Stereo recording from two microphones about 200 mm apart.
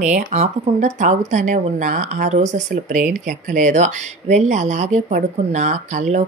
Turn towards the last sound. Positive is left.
turn(degrees=-35)  # may be behind; listen again after turning